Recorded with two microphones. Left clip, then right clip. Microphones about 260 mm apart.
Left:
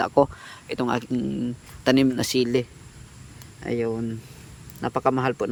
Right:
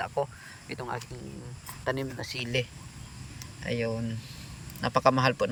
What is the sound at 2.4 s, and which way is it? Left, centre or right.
Speech, centre.